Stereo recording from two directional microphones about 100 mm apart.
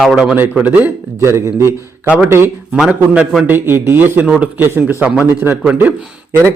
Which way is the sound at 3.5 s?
25° right (ahead or behind).